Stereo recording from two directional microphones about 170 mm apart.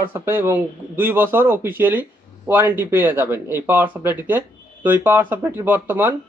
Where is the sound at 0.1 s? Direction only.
15° right (ahead or behind).